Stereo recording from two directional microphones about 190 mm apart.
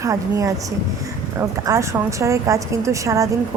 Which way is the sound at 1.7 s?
15° right (ahead or behind).